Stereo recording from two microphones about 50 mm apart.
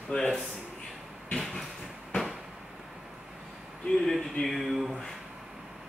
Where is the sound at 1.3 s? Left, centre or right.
Centre.